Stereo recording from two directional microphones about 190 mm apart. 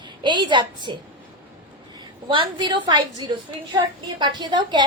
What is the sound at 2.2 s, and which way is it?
A woman's voice, 25° right (ahead or behind).